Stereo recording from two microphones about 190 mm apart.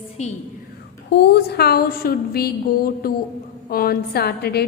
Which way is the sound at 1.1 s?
60° left (ahead or behind).